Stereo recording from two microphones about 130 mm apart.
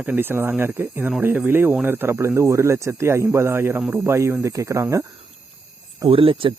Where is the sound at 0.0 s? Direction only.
15° right (ahead or behind).